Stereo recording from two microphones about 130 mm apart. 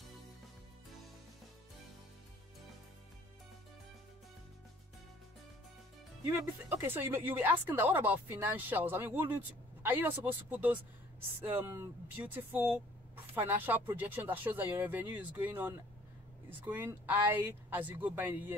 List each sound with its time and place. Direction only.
6.2 s speech: 20° right (ahead or behind)